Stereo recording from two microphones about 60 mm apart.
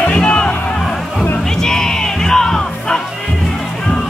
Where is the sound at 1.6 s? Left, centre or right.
Centre.